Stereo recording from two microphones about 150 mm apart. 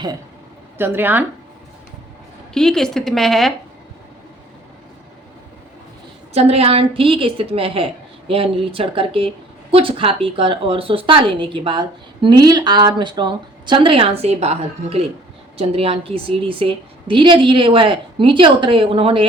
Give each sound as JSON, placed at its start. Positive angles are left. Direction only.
{"t": 0.8, "sound": "speech", "side_deg": -15}
{"t": 2.5, "sound": "a woman's voice", "side_deg": 5}
{"t": 6.3, "sound": "a woman's voice", "side_deg": -45}